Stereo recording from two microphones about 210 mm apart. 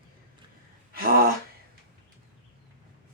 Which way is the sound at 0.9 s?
45° right (ahead or behind).